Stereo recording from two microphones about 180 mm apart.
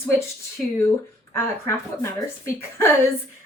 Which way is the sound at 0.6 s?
5° left (ahead or behind).